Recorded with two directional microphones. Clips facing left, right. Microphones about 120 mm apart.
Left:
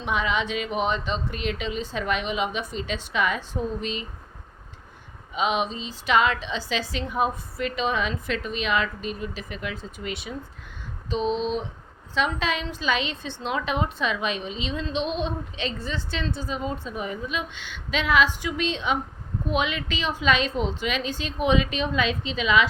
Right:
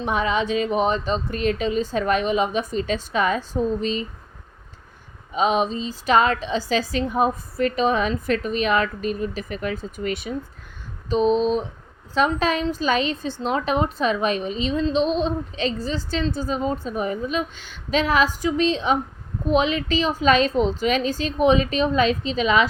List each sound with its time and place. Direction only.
0.0 s a woman's voice: 40° right (ahead or behind)
5.3 s a woman's voice: 40° right (ahead or behind)